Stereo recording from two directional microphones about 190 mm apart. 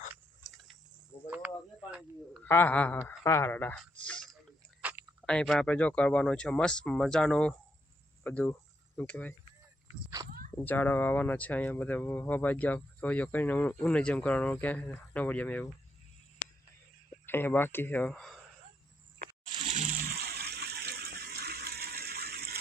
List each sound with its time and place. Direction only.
1.9 s speech: 5° right (ahead or behind)
2.4 s speech: 10° left (ahead or behind)
4.8 s chewing: 10° right (ahead or behind)
5.2 s speech: 5° left (ahead or behind)
10.5 s speech: 10° left (ahead or behind)
17.2 s speech: 10° left (ahead or behind)
19.7 s water: 40° right (ahead or behind)